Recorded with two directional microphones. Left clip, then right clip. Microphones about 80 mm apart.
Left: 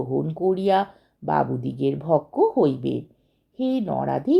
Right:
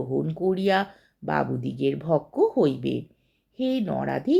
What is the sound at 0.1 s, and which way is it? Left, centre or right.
Speech, left.